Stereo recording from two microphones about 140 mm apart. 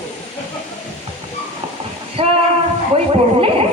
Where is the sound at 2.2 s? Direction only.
40° right (ahead or behind).